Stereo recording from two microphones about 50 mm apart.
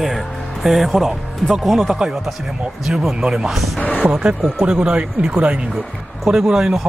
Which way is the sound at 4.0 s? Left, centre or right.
Centre.